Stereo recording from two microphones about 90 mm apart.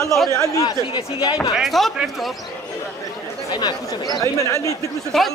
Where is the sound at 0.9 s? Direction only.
50° left (ahead or behind).